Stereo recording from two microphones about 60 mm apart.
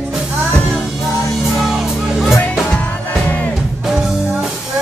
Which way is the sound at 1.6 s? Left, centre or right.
Centre.